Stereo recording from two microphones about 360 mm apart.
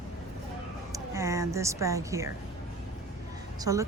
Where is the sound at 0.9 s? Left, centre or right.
Centre.